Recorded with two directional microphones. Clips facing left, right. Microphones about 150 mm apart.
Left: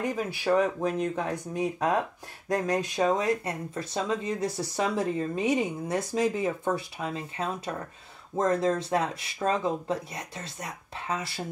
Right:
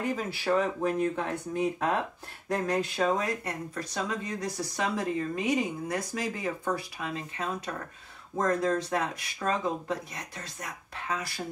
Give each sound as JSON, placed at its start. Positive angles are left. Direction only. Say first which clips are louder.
{"t": 0.0, "sound": "speech", "louder": "left 2 dB", "side_deg": 15}